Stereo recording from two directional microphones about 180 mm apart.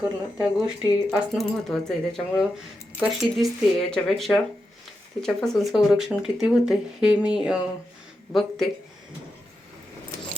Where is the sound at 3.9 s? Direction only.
Centre (ahead or behind).